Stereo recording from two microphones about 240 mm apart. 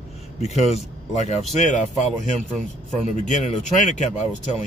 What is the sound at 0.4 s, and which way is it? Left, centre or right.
Speech, left.